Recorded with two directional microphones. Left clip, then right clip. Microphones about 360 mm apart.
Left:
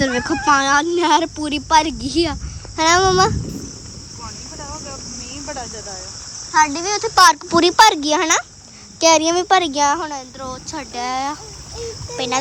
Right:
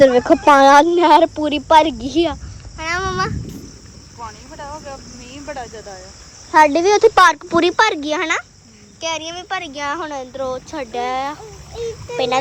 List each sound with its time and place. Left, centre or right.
0.0 s speech: centre
2.7 s speech: centre
4.6 s cricket: centre
6.5 s a child's voice: centre
7.2 s speech: centre
9.0 s speech: left
9.3 s speech: centre